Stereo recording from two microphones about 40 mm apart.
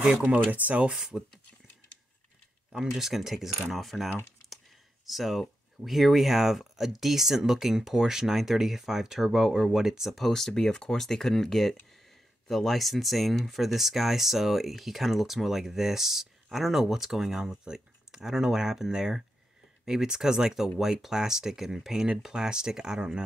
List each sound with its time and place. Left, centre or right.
0.2 s speech: right
0.9 s speech: centre
2.9 s speech: centre
3.7 s mechanisms: centre
5.0 s speech: centre
10.1 s speech: centre; by 23.2 s right